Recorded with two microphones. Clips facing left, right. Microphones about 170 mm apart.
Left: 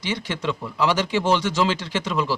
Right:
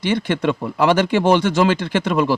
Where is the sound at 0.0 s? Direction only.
55° right (ahead or behind).